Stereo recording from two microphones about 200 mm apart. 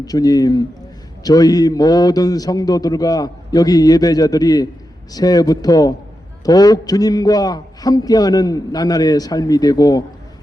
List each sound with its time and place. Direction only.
0.0 s a man's voice: 20° left (ahead or behind)